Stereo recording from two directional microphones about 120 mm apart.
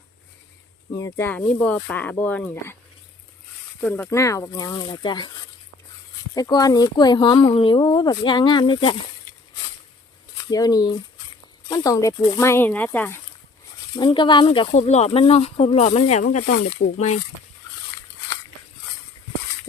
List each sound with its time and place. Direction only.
0.9 s speech: 20° left (ahead or behind)
3.8 s speech: 15° left (ahead or behind); by 5.3 s 40° left (ahead or behind)
6.3 s speech: 30° left (ahead or behind)
10.5 s speech: 30° left (ahead or behind)
13.9 s speech: 40° left (ahead or behind)
14.7 s speech: 75° left (ahead or behind)